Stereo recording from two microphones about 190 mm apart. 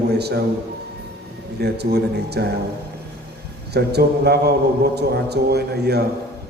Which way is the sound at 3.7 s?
60° right (ahead or behind).